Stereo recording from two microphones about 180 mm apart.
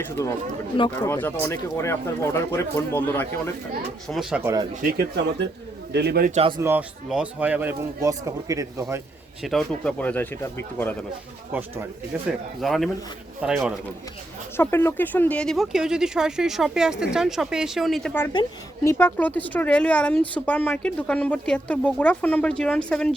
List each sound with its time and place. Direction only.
0.2 s speech: 20° left (ahead or behind)
4.1 s speech: 5° right (ahead or behind)
4.8 s speech: 60° right (ahead or behind)
6.6 s speech: 15° right (ahead or behind)
9.4 s speech: centre (ahead or behind)
12.1 s speech: 10° right (ahead or behind)
12.6 s speech: centre (ahead or behind)
14.5 s speech: 10° left (ahead or behind)
18.3 s speech: 25° left (ahead or behind)
18.9 s speech: 10° left (ahead or behind)